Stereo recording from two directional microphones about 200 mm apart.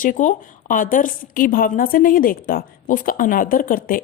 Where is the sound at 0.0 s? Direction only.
40° left (ahead or behind).